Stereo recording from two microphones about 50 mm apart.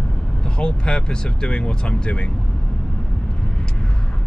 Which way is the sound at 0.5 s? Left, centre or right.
Centre.